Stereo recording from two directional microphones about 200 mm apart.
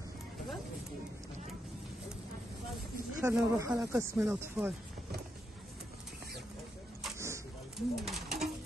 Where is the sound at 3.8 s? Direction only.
15° right (ahead or behind).